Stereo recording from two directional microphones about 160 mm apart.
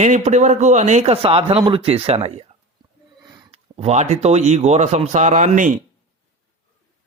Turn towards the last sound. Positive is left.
turn(degrees=-55)  # may be behind; listen again after turning